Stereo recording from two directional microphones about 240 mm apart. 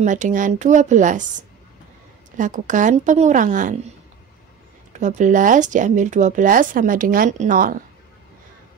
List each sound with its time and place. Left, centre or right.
0.0 s speech: right
4.9 s speech: right